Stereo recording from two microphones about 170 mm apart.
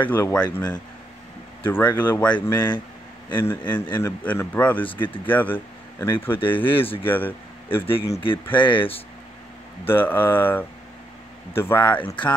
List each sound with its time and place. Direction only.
0.0 s speech: 10° left (ahead or behind)
1.6 s speech: 10° left (ahead or behind)
6.8 s speech: 30° left (ahead or behind)
7.1 s speech: 10° left (ahead or behind)
8.0 s speech: 30° left (ahead or behind)
8.5 s speech: 10° left (ahead or behind)
9.8 s speech: 10° left (ahead or behind)